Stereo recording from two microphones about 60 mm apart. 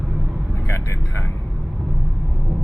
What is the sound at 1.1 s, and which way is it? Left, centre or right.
Speech, left.